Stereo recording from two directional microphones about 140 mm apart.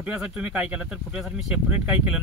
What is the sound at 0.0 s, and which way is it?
Speech, 5° right (ahead or behind).